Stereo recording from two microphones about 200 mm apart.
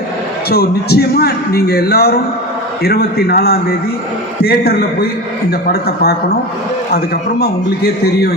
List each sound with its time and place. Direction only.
0.5 s a man's voice: 55° left (ahead or behind)